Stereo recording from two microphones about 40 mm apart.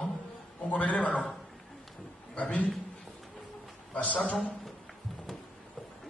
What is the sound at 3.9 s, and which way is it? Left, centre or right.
Speech, left.